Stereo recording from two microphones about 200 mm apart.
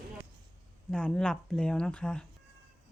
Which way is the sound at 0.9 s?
5° left (ahead or behind).